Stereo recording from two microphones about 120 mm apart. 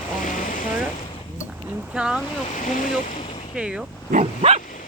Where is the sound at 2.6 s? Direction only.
90° left.